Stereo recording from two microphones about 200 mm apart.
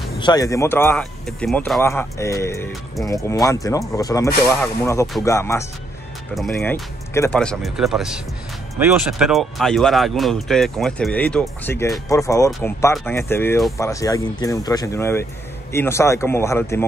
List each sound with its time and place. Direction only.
0.2 s speech: 20° left (ahead or behind)
6.3 s speech: centre (ahead or behind)